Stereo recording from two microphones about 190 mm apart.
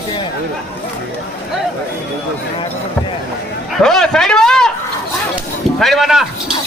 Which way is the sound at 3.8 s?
5° left (ahead or behind).